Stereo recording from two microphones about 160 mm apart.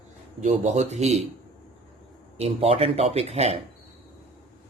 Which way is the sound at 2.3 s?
40° right (ahead or behind).